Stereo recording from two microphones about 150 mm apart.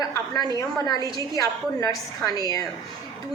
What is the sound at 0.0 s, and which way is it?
A woman's voice, 25° left (ahead or behind).